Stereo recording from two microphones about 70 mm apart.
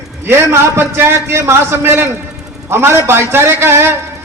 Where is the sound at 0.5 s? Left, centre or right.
Right.